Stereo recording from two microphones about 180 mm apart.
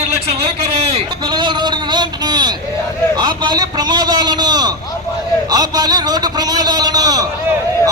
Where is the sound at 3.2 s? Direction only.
25° right (ahead or behind).